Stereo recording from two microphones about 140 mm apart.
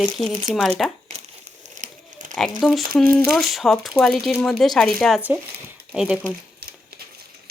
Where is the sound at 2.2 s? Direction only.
70° right (ahead or behind).